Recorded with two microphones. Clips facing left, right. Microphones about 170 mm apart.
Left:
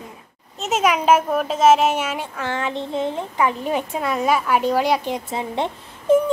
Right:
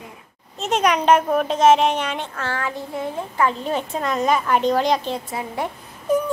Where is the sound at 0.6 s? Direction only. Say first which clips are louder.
Even; 5° left (ahead or behind).